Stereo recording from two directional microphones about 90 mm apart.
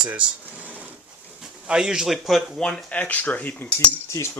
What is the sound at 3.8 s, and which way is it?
Speech, 35° left (ahead or behind).